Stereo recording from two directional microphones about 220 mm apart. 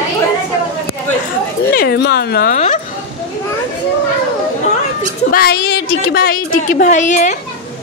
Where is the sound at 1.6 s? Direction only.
45° left (ahead or behind).